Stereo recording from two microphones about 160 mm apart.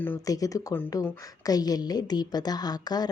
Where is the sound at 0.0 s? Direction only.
15° left (ahead or behind).